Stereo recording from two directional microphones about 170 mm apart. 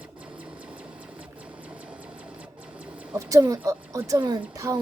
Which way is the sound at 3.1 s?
20° right (ahead or behind).